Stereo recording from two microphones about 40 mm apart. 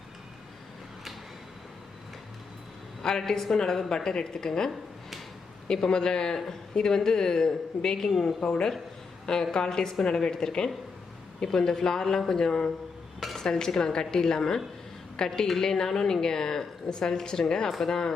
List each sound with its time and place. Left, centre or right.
3.0 s a woman's voice: centre
13.1 s dishes: centre
13.4 s a woman's voice: centre
15.3 s a woman's voice: centre